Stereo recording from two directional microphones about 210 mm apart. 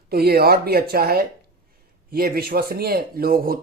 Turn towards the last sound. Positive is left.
turn(degrees=-45)  # may be behind; listen again after turning